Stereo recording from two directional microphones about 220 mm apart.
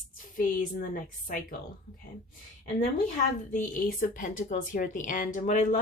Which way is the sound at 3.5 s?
35° left (ahead or behind).